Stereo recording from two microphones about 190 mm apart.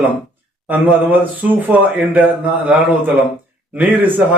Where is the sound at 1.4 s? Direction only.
10° right (ahead or behind).